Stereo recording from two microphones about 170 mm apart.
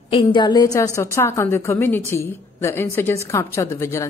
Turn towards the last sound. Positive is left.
turn(degrees=15)  # may be behind; listen again after turning